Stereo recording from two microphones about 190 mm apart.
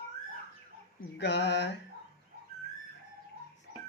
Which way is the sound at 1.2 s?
65° left (ahead or behind).